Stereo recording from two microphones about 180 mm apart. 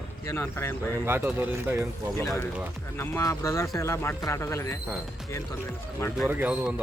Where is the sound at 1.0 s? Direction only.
10° right (ahead or behind).